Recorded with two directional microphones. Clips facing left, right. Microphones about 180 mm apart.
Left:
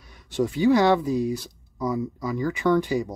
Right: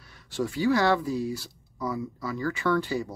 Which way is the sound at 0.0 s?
20° left (ahead or behind).